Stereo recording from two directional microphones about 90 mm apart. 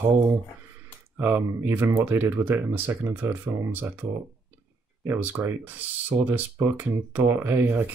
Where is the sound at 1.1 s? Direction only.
20° right (ahead or behind).